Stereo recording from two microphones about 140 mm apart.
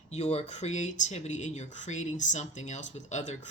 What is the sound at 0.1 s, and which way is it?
Speech, 50° left (ahead or behind).